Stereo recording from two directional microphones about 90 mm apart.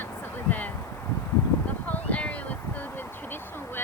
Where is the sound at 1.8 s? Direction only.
15° left (ahead or behind).